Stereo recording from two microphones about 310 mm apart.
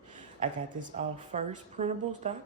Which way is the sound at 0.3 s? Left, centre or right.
Right.